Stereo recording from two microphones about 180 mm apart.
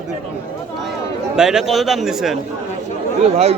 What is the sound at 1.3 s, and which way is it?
Speech, 5° right (ahead or behind).